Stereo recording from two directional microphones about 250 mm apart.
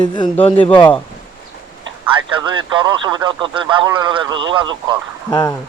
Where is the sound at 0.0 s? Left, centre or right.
Centre.